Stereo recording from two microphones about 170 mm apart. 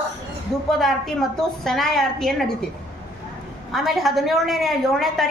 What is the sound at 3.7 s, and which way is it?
A woman's voice, centre (ahead or behind).